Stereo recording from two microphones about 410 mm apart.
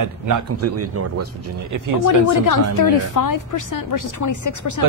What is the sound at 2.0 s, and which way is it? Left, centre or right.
A woman's voice, left.